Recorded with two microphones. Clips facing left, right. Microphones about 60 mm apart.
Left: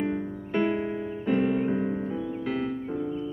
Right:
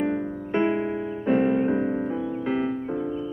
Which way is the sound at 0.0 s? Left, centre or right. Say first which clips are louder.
Right 3 dB; centre.